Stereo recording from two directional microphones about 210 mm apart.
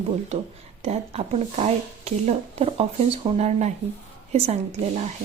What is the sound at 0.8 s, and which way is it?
Speech, 30° right (ahead or behind).